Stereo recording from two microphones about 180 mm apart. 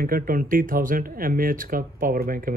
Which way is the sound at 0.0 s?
55° right (ahead or behind).